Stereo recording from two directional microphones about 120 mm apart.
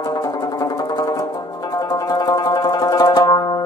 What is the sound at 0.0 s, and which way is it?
Music, 30° left (ahead or behind).